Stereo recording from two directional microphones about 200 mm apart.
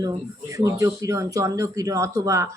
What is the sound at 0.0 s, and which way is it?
Speech, 15° right (ahead or behind).